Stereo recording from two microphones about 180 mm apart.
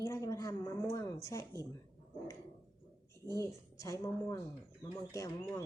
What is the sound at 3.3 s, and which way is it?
Speech, 15° left (ahead or behind).